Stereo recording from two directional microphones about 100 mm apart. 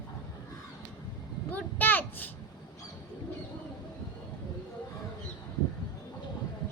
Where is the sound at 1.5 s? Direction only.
20° left (ahead or behind).